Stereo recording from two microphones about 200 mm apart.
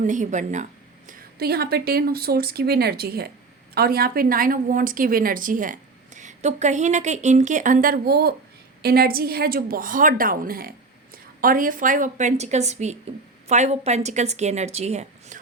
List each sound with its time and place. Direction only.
0.0 s a woman's voice: 40° right (ahead or behind)